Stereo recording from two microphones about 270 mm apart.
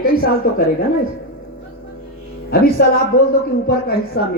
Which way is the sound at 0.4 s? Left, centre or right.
Left.